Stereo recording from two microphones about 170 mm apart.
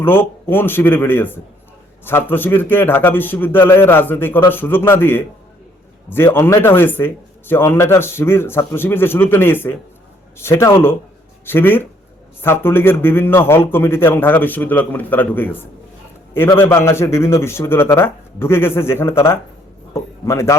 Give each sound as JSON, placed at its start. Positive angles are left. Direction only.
{"t": 0.0, "sound": "a man's voice", "side_deg": 15}